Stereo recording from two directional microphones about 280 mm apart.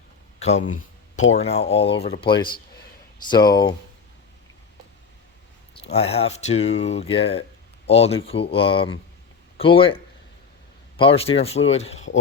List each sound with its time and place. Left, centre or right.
0.3 s a sound: left
1.3 s speech: left
5.9 s speech: left